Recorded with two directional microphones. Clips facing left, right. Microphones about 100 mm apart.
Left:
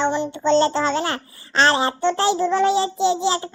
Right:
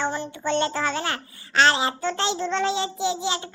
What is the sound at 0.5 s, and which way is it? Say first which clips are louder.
A child's voice: left 6 dB; 30° left (ahead or behind).